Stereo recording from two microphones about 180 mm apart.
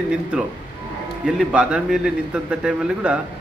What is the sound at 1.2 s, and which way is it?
A man's voice, 5° right (ahead or behind).